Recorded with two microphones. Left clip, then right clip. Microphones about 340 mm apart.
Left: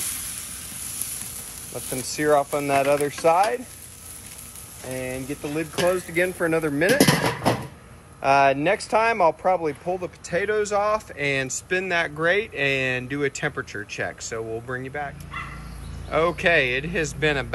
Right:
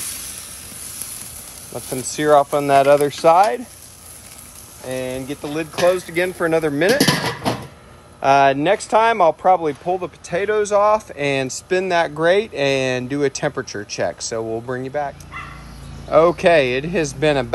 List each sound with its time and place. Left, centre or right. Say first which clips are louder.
1.7 s speech: right 4 dB; right
4.8 s speech: right 5 dB; centre
7.0 s a sound: right 2 dB; centre
8.2 s speech: right 4 dB; right